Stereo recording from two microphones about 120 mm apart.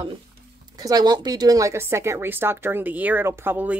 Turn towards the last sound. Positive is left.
turn(degrees=-15)  # may be behind; listen again after turning